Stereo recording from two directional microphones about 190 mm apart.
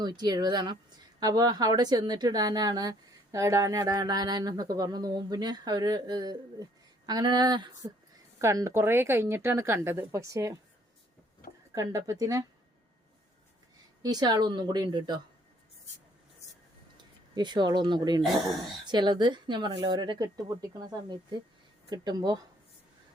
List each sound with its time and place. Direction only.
0.0 s speech: 20° right (ahead or behind)
11.7 s speech: 15° right (ahead or behind)
14.0 s speech: 20° right (ahead or behind)
17.0 s speech: 25° right (ahead or behind)